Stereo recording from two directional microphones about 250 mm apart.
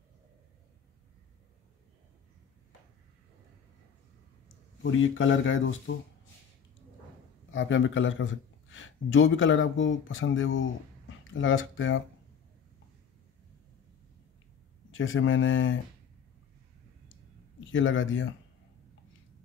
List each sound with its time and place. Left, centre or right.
4.9 s a man's voice: left
7.5 s a man's voice: left
14.9 s a man's voice: left
17.6 s a man's voice: left